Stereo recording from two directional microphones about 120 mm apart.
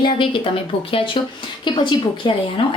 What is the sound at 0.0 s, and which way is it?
Speech, 45° left (ahead or behind).